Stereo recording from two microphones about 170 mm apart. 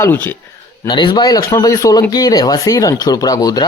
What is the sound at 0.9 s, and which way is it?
Speech, 25° left (ahead or behind).